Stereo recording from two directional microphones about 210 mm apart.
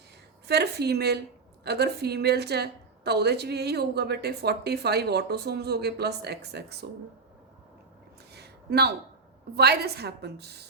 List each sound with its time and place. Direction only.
0.4 s a woman's voice: 50° right (ahead or behind)
8.3 s a sound: 50° right (ahead or behind)
9.6 s a woman's voice: 50° right (ahead or behind)